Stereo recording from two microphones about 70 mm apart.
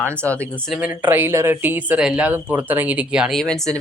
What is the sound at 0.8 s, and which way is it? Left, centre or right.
Speech, right.